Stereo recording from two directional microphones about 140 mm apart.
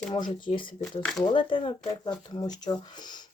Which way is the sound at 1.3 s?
35° left (ahead or behind).